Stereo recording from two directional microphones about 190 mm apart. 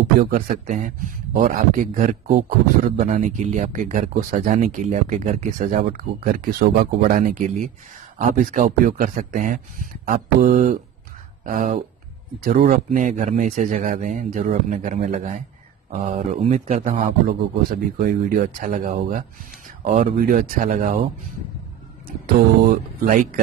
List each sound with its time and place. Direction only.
0.2 s a man's voice: 45° right (ahead or behind)
6.2 s a man's voice: 50° right (ahead or behind)
17.3 s speech: 50° right (ahead or behind)
22.7 s speech: 45° right (ahead or behind)